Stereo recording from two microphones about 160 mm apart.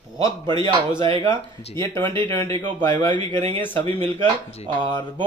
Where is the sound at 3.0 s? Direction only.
10° left (ahead or behind).